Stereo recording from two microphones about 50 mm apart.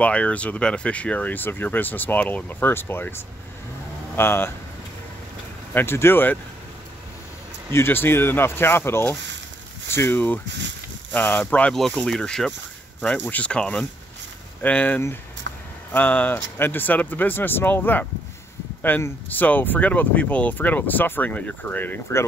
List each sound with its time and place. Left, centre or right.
0.0 s speech: left
4.2 s speech: left
5.7 s speech: left
7.7 s speech: left
10.1 s speech: left
12.1 s speech: centre
13.2 s speech: left
14.6 s speech: left
16.5 s speech: left